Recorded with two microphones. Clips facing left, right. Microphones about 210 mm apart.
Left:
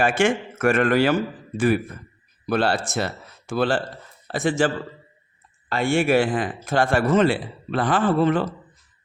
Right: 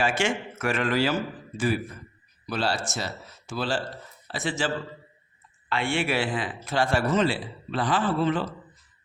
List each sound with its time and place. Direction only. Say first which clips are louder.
0.0 s a man's voice: left 6 dB; 55° left (ahead or behind)